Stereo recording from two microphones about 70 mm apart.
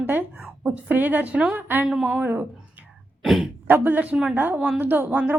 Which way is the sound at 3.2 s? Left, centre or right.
Centre.